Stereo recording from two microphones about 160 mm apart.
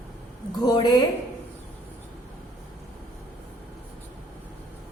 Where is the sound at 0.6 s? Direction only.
25° left (ahead or behind).